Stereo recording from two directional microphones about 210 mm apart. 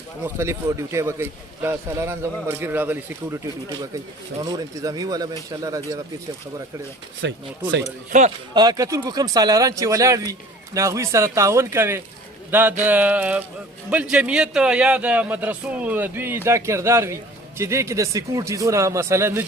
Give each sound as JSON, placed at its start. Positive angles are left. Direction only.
{"t": 0.3, "sound": "a man's voice", "side_deg": -15}
{"t": 7.2, "sound": "speech", "side_deg": -55}
{"t": 8.1, "sound": "speech", "side_deg": -35}
{"t": 8.5, "sound": "a man's voice", "side_deg": -20}